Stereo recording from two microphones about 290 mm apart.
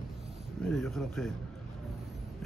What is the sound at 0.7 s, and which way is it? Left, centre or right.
Speech, centre.